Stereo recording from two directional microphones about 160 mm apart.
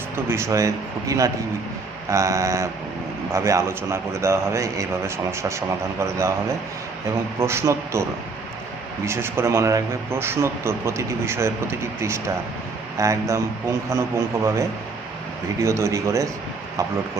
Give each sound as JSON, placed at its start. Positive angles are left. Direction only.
{"t": 0.3, "sound": "speech", "side_deg": -15}
{"t": 7.3, "sound": "speech", "side_deg": -15}
{"t": 9.0, "sound": "speech", "side_deg": -15}